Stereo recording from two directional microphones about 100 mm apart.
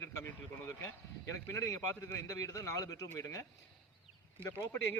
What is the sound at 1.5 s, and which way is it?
A man's voice, 30° left (ahead or behind).